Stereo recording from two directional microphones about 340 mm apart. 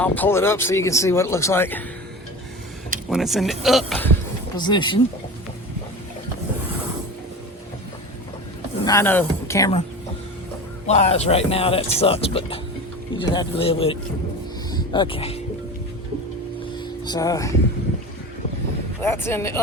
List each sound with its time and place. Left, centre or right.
0.0 s speech: centre
3.1 s speech: centre
4.5 s speech: centre
8.8 s speech: centre
10.8 s speech: centre
17.0 s speech: centre
19.0 s speech: centre